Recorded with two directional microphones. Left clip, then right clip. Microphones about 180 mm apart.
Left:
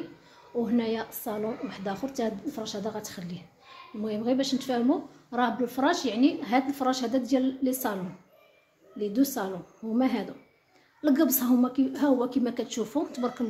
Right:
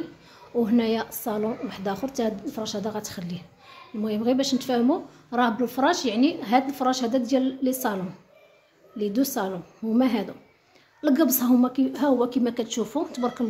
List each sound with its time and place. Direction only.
0.7 s a woman's voice: 25° right (ahead or behind)